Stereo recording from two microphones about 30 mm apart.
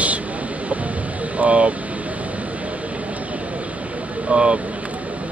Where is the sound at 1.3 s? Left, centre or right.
Right.